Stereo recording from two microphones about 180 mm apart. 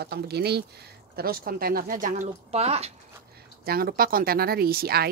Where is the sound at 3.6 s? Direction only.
55° right (ahead or behind).